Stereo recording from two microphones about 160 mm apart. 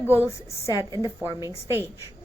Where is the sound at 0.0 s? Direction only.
10° right (ahead or behind).